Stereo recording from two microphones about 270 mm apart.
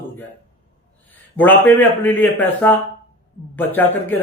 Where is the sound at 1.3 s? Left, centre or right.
Centre.